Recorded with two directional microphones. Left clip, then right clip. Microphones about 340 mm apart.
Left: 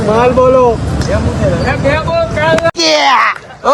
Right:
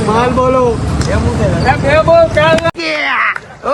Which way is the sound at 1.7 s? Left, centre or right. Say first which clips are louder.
Right 6 dB; centre.